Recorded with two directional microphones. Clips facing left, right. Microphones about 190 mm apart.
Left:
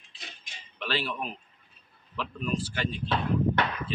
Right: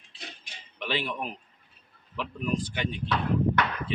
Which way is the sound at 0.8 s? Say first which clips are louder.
Right 1 dB; 20° right (ahead or behind).